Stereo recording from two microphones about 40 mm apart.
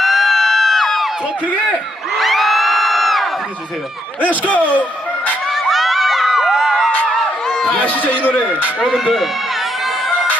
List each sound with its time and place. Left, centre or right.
0.0 s crowd: centre
2.1 s crowd: centre
4.3 s a man's voice: left
5.5 s crowd: centre
7.4 s a sound: centre
7.9 s a sound: left